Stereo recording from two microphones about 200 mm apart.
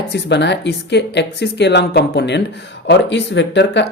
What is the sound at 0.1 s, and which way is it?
Speech, 60° left (ahead or behind).